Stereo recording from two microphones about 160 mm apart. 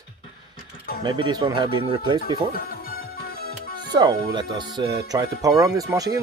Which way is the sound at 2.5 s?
65° left (ahead or behind).